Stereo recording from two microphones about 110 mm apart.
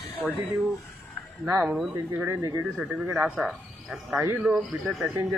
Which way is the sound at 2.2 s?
25° right (ahead or behind).